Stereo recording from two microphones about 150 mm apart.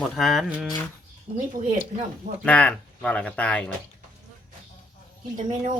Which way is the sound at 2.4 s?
10° left (ahead or behind).